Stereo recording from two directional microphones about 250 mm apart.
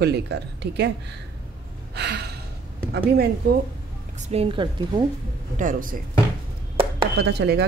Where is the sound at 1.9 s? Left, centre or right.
Right.